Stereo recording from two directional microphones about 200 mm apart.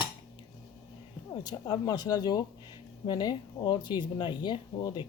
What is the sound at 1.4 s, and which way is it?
Speech, 20° left (ahead or behind).